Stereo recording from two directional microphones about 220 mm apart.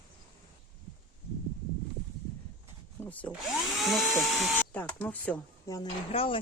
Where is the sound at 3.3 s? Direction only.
Centre (ahead or behind).